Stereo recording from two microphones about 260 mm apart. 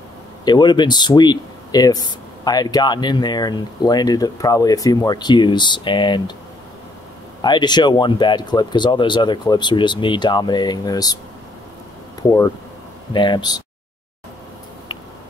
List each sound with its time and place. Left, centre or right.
0.5 s speech: centre
7.4 s speech: centre
12.2 s speech: centre